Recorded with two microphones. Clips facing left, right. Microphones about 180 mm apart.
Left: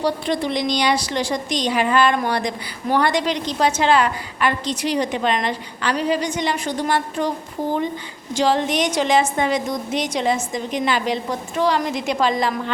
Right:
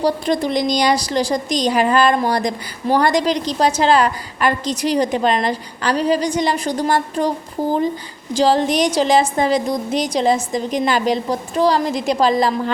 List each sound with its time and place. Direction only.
0.0 s a woman's voice: 40° right (ahead or behind)
8.3 s a woman's voice: 35° right (ahead or behind)